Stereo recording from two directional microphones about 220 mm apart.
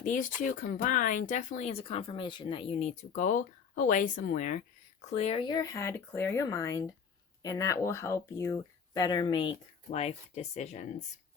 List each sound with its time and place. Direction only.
0.0 s speech: 35° left (ahead or behind)